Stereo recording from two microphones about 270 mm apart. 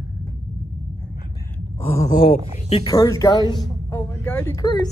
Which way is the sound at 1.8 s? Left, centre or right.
Left.